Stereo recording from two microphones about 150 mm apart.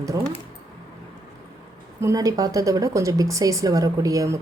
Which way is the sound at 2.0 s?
20° right (ahead or behind).